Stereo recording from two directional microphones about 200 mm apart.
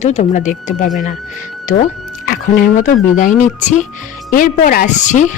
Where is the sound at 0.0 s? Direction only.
35° left (ahead or behind).